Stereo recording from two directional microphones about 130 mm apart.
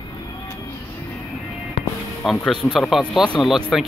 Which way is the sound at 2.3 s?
5° left (ahead or behind).